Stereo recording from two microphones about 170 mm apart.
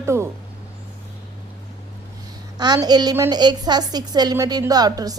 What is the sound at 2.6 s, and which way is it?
A woman's voice, 25° right (ahead or behind).